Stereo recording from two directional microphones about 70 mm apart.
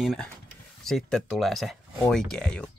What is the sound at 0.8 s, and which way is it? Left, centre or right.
Speech, centre.